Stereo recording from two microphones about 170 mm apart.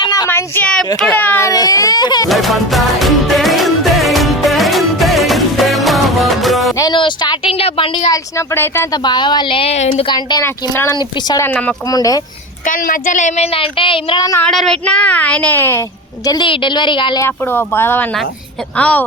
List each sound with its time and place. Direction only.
0.0 s a sound: 20° left (ahead or behind); by 0.9 s 5° left (ahead or behind)
0.9 s speech: 10° left (ahead or behind); by 2.3 s 25° left (ahead or behind)
2.3 s music: centre (ahead or behind)
6.7 s speech: 25° left (ahead or behind)
10.4 s a woman's voice: 15° left (ahead or behind)
11.4 s a woman's voice: 10° left (ahead or behind)
11.9 s speech: 20° left (ahead or behind)
12.6 s speech: 55° left (ahead or behind); by 14.4 s 20° left (ahead or behind)
14.4 s a woman's voice: centre (ahead or behind); by 17.2 s 30° left (ahead or behind)
17.2 s a woman's voice: 15° left (ahead or behind)